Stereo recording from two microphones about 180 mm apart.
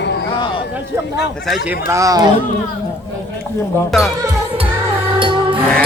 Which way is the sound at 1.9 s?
20° right (ahead or behind).